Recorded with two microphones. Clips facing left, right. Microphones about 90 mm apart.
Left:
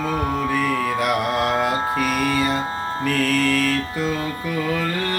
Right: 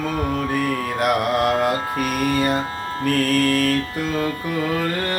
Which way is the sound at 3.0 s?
45° right (ahead or behind).